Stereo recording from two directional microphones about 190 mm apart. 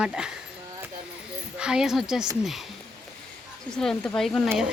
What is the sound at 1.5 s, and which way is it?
Speech, 5° right (ahead or behind).